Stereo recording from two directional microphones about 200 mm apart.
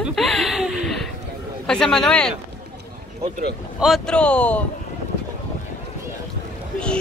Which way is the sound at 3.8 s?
Centre (ahead or behind).